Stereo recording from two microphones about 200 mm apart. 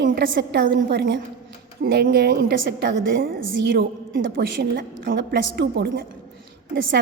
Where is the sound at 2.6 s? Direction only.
65° right (ahead or behind).